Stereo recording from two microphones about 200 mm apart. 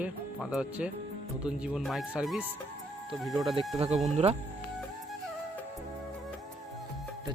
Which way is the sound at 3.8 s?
35° right (ahead or behind).